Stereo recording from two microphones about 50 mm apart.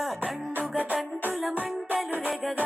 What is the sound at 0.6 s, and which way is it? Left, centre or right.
Music, right.